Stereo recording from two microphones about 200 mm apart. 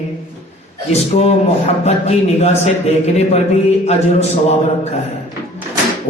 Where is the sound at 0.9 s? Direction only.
35° left (ahead or behind).